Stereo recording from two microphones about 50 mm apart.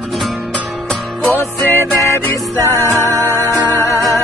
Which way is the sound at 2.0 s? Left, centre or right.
Left.